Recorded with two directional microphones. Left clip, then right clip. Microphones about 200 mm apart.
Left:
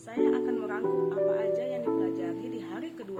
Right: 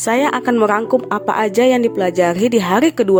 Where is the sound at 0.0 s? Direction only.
55° right (ahead or behind).